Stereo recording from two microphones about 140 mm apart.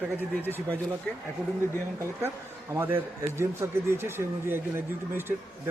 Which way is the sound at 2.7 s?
15° right (ahead or behind).